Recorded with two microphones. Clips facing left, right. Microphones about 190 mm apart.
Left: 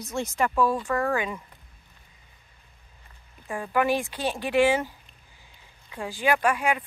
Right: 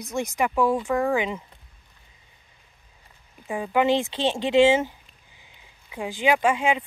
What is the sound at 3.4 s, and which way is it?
Speech, 20° right (ahead or behind).